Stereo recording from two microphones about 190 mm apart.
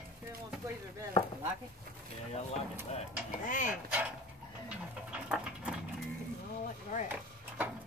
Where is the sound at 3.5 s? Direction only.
40° left (ahead or behind).